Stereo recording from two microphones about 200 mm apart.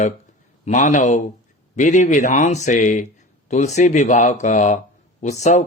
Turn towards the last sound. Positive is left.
turn(degrees=35)  # may be behind; listen again after turning